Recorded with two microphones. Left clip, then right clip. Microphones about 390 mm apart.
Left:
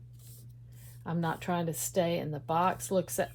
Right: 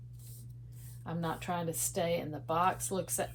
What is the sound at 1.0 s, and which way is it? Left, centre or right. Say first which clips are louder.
Speech: left 3 dB; left.